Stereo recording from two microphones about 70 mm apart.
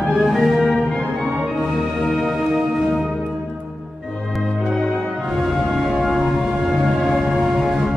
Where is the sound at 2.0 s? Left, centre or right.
Centre.